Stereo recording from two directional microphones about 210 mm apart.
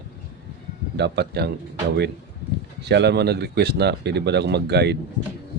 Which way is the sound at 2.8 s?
55° right (ahead or behind).